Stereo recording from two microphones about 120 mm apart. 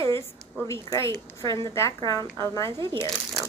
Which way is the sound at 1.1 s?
40° right (ahead or behind).